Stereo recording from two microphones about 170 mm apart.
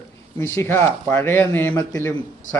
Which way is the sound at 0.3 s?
15° left (ahead or behind).